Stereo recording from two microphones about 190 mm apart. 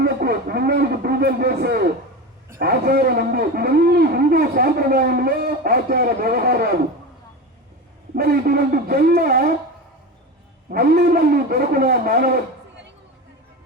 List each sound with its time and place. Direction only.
0.0 s a sound: 55° right (ahead or behind)
2.6 s speech: 50° right (ahead or behind)
8.1 s speech: 50° right (ahead or behind)
10.7 s speech: 50° right (ahead or behind)